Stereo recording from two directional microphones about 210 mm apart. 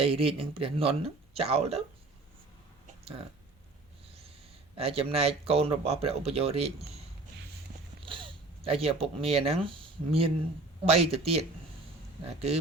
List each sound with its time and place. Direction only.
0.0 s speech: 25° right (ahead or behind)
2.8 s a sound: 30° right (ahead or behind)
4.7 s speech: 30° right (ahead or behind)
8.0 s speech: 25° right (ahead or behind)